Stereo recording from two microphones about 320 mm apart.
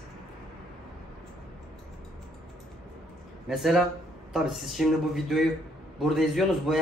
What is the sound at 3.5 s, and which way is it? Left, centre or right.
A man's voice, centre.